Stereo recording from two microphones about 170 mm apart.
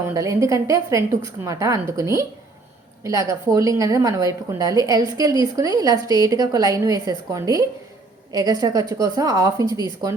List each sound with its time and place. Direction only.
0.0 s a woman's voice: 20° right (ahead or behind)